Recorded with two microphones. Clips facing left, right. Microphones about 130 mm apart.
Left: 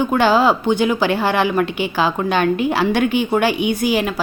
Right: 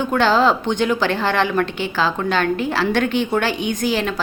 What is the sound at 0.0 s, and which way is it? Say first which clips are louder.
Speech: left 2 dB; 15° left (ahead or behind).